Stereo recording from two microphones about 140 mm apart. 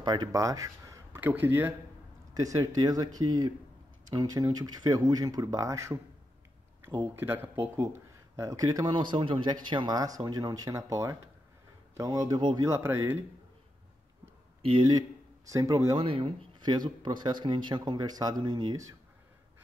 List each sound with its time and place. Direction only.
0.0 s speech: 30° right (ahead or behind); by 1.7 s 15° right (ahead or behind)
2.3 s speech: 25° right (ahead or behind)
12.6 s speech: 20° right (ahead or behind)
14.6 s speech: 45° right (ahead or behind)
14.9 s a man's voice: 25° right (ahead or behind)
16.0 s speech: 45° right (ahead or behind)